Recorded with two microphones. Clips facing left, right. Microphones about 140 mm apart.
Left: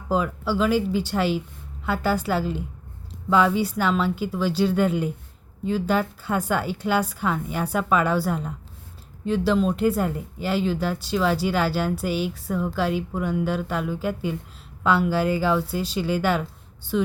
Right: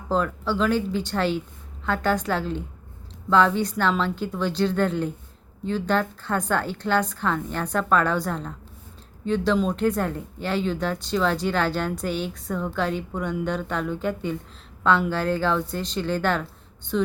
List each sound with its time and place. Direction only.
0.1 s a woman's voice: 10° left (ahead or behind)